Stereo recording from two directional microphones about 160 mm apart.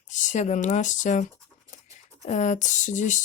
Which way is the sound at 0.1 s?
50° left (ahead or behind).